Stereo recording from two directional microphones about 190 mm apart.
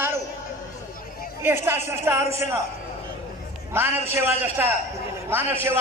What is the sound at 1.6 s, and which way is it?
Speech, 15° right (ahead or behind).